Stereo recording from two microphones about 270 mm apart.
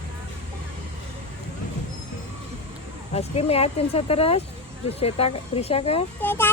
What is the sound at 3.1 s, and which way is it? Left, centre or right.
Speech, left.